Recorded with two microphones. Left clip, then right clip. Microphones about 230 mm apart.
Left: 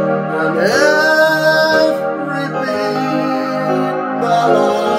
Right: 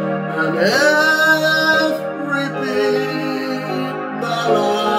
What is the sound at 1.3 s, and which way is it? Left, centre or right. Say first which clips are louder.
Music: left 3 dB; right.